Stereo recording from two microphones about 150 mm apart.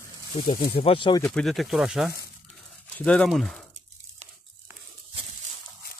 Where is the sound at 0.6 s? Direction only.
35° left (ahead or behind).